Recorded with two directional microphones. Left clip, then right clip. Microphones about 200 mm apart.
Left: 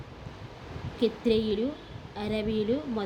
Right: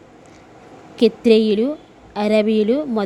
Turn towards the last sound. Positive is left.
turn(degrees=-50)  # may be behind; listen again after turning